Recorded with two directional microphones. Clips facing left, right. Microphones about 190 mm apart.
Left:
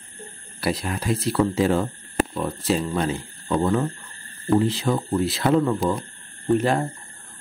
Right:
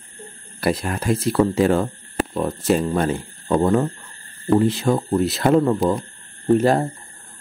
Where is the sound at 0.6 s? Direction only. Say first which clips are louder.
Right 4 dB; 50° right (ahead or behind).